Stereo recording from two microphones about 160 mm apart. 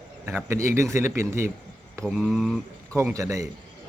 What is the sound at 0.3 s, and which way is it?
Speech, 15° right (ahead or behind).